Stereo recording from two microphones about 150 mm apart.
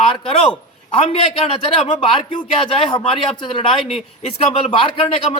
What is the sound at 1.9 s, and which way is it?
Speech, 35° left (ahead or behind).